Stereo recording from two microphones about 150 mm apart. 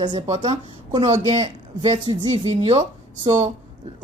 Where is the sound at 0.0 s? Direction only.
30° right (ahead or behind).